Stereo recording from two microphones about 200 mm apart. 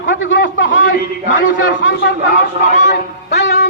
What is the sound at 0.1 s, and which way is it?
A man's voice, 70° left (ahead or behind).